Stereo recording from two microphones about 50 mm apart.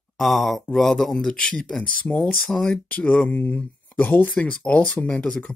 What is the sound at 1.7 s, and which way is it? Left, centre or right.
Speech, left.